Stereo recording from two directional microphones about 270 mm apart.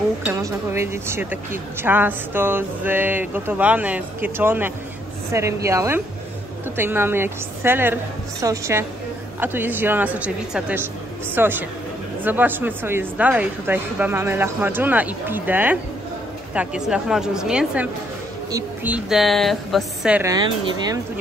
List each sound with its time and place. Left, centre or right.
0.2 s a woman's voice: centre